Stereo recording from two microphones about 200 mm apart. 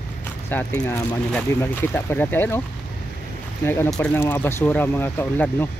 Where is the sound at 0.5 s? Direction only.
5° left (ahead or behind).